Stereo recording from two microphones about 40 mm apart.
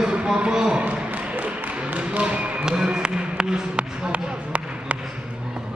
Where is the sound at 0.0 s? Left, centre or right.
Right.